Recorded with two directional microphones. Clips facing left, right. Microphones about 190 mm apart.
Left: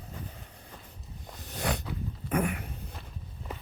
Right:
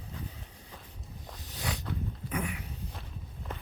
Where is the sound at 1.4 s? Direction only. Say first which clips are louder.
Left 5 dB; 55° left (ahead or behind).